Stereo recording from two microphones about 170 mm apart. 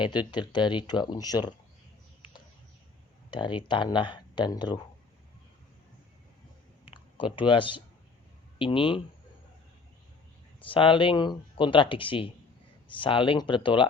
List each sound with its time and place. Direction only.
0.0 s speech: 25° left (ahead or behind)
3.2 s speech: 25° left (ahead or behind)
7.3 s speech: 30° left (ahead or behind)
10.6 s speech: 30° left (ahead or behind)